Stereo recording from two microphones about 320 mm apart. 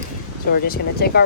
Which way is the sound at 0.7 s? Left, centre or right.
Left.